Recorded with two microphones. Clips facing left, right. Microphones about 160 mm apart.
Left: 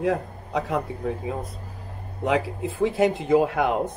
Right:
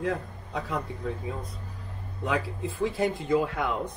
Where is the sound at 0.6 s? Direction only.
25° left (ahead or behind).